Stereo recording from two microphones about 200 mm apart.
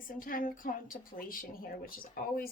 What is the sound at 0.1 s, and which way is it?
Speech, 45° left (ahead or behind).